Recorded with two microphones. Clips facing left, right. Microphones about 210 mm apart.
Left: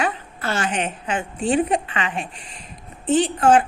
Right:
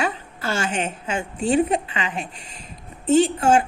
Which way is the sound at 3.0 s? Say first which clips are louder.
Right 2 dB; 45° right (ahead or behind).